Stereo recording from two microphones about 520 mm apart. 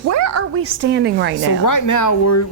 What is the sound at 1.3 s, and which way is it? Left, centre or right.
Speech, left.